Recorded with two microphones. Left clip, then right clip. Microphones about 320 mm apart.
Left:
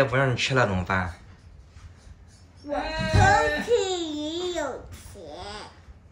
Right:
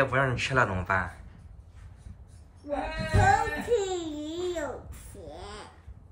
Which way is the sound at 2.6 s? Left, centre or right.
Centre.